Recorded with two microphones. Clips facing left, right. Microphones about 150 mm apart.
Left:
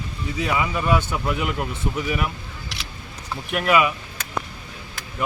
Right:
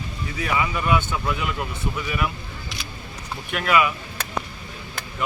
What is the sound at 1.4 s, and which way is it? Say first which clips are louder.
Speech: left 2 dB; 50° left (ahead or behind).